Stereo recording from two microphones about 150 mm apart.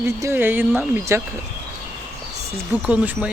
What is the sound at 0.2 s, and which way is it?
Speech, 15° right (ahead or behind).